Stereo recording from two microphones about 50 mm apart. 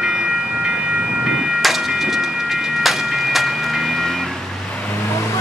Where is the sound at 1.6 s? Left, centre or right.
Centre.